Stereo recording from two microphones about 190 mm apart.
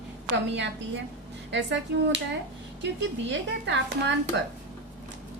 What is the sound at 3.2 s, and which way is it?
Speech, 70° right (ahead or behind).